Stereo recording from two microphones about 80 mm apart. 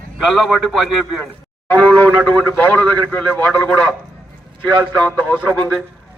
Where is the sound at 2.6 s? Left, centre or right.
Left.